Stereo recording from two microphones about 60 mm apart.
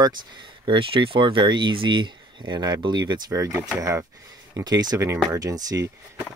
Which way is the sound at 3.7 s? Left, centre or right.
Right.